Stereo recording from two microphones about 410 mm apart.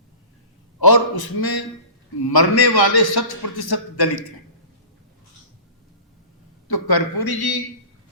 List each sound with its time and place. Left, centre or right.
0.8 s a man's voice: left
6.7 s a man's voice: left